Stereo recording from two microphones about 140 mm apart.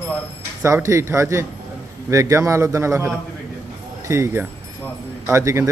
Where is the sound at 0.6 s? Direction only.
20° right (ahead or behind).